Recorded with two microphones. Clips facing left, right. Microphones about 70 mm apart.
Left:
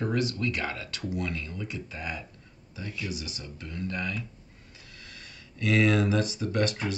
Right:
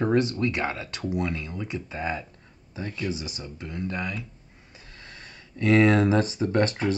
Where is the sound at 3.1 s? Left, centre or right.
Right.